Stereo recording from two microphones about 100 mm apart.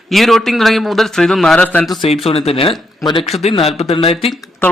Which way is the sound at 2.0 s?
75° left (ahead or behind).